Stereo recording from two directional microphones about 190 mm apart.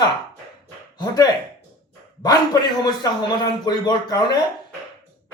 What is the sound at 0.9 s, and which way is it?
Speech, 20° left (ahead or behind).